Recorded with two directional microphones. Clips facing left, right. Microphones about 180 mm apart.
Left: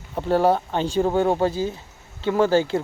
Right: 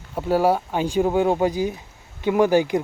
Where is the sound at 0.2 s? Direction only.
10° right (ahead or behind).